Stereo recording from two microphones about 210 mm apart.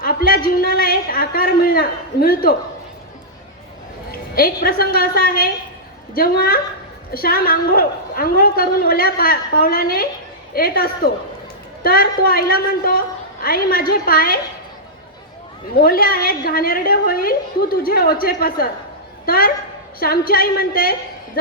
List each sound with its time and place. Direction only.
0.0 s a woman's voice: 45° left (ahead or behind)
4.4 s a woman's voice: 45° left (ahead or behind)
15.7 s a woman's voice: 45° left (ahead or behind)